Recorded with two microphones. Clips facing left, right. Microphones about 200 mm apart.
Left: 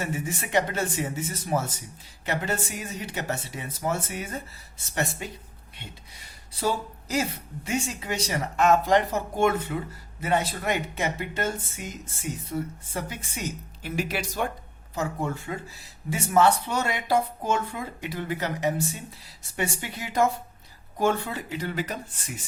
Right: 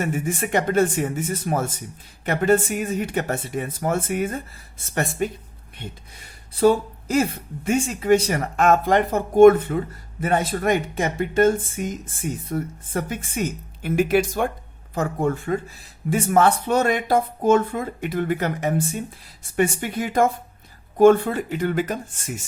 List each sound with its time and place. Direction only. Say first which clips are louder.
0.0 s speech: right 6 dB; 50° right (ahead or behind)
6.6 s speech: right 11 dB; 55° right (ahead or behind)